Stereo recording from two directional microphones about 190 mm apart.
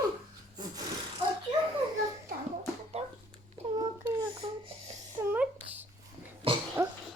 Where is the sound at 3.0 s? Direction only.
35° right (ahead or behind).